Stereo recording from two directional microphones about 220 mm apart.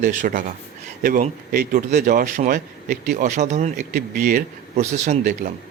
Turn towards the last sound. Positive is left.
turn(degrees=-35)  # may be behind; listen again after turning